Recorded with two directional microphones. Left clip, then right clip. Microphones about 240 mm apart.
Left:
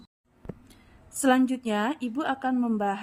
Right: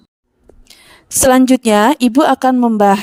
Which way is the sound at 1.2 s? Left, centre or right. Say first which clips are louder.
Right 14 dB; right.